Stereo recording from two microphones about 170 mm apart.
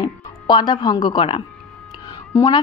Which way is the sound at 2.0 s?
25° left (ahead or behind).